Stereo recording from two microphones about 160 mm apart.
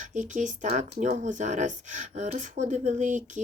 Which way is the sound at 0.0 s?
50° right (ahead or behind).